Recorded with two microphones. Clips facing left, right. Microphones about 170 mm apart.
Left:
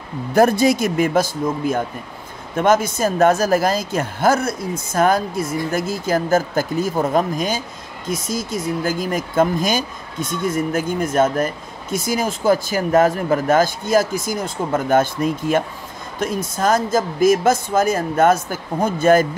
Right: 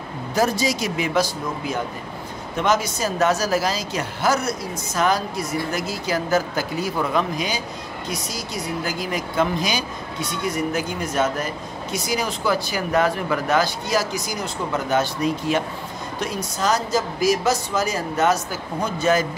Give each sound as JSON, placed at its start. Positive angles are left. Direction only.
{"t": 0.3, "sound": "speech", "side_deg": 55}